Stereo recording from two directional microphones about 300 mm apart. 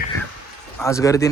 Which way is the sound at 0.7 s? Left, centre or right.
Centre.